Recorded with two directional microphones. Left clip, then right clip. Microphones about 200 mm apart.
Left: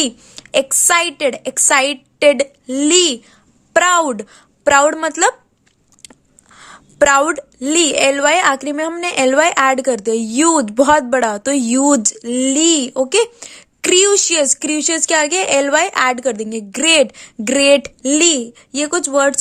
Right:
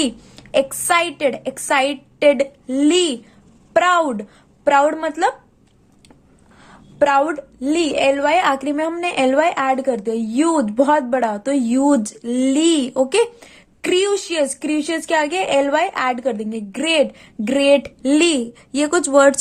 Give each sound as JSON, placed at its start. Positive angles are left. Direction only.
{"t": 0.0, "sound": "a woman's voice", "side_deg": 30}
{"t": 6.6, "sound": "a woman's voice", "side_deg": 40}